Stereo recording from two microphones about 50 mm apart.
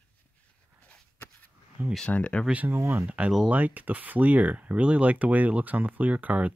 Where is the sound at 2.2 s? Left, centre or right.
Left.